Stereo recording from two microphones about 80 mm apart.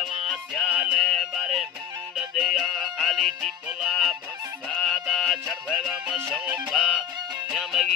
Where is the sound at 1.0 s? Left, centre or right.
Centre.